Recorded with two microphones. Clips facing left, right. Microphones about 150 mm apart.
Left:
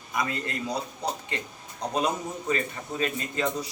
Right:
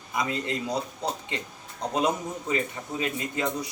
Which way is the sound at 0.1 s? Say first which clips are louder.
Right 1 dB; 20° right (ahead or behind).